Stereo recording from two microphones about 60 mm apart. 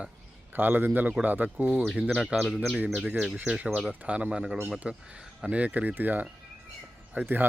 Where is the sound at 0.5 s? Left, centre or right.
Right.